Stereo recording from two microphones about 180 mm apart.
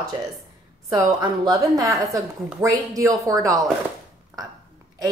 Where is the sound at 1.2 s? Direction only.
20° right (ahead or behind).